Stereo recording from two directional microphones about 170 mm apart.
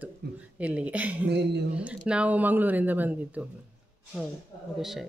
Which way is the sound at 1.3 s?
80° right.